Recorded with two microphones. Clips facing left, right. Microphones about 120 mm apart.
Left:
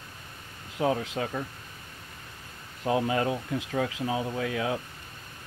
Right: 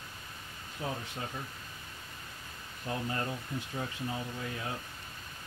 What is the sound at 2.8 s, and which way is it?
Speech, 90° left.